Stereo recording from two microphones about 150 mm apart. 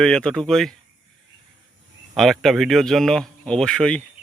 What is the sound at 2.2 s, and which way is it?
Speech, centre (ahead or behind).